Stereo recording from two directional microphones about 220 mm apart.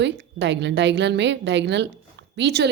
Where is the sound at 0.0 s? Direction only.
50° right (ahead or behind).